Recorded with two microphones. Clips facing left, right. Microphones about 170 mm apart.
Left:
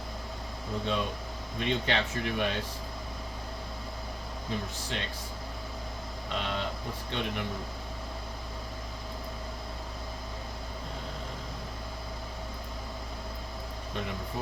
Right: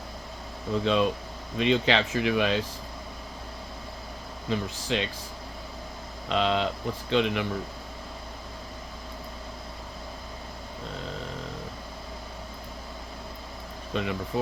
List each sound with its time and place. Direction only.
0.9 s speech: 90° right
4.4 s speech: 90° right
6.2 s a sound: 90° right
7.1 s speech: 90° right
13.9 s speech: 90° right